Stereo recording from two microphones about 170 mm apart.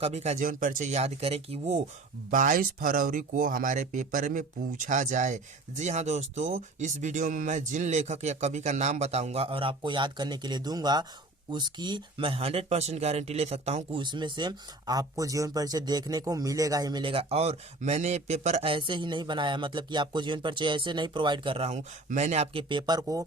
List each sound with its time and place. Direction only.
0.0 s speech: 40° right (ahead or behind)
2.3 s speech: 50° right (ahead or behind); by 23.2 s 20° right (ahead or behind)